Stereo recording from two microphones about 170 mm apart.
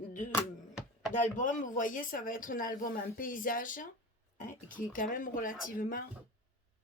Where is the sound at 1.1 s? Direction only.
50° left (ahead or behind).